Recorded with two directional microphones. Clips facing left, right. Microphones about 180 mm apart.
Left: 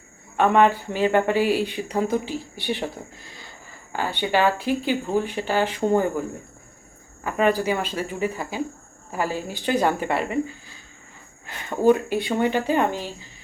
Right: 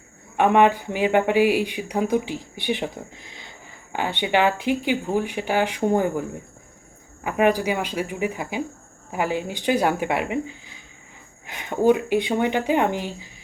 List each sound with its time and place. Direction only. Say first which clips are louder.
0.3 s speech: right 1 dB; 15° right (ahead or behind)
7.3 s speech: right 1 dB; 15° right (ahead or behind)